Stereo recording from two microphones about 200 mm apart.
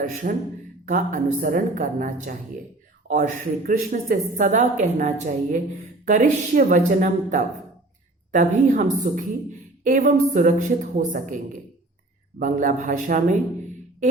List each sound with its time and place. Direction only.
0.0 s a man's voice: 45° right (ahead or behind)
12.4 s a woman's voice: 40° right (ahead or behind)